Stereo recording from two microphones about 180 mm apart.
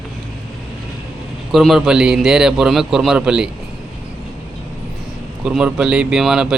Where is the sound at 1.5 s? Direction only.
Centre (ahead or behind).